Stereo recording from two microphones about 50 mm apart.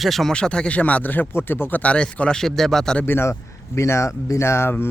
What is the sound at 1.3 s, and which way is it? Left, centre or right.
Speech, left.